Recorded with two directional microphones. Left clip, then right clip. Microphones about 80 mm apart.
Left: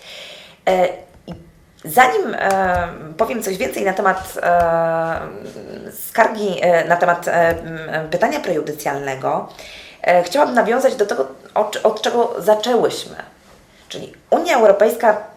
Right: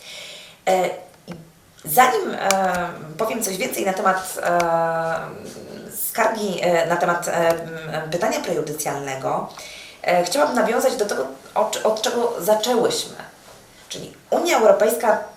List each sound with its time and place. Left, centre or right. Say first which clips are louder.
0.1 s a sound: left 2 dB; right
1.9 s speech: left 3 dB; right
6.1 s speech: left 5 dB; right